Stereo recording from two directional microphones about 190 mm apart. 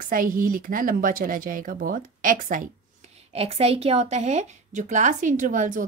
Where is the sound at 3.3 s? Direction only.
30° right (ahead or behind).